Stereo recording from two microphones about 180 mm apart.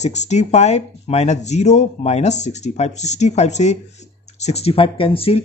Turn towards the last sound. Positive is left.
turn(degrees=30)  # may be behind; listen again after turning